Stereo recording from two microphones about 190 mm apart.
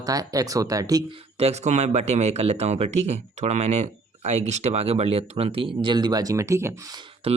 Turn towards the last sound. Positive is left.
turn(degrees=-30)  # may be behind; listen again after turning